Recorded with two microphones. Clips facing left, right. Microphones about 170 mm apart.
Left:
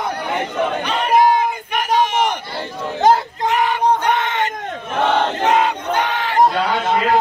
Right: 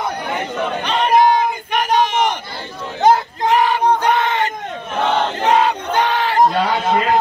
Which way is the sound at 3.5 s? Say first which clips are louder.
Right 2 dB; 30° right (ahead or behind).